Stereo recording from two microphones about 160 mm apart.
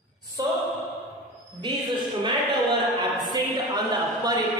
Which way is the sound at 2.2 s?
30° right (ahead or behind).